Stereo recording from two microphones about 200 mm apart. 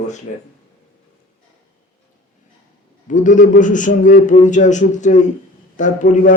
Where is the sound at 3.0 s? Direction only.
40° left (ahead or behind).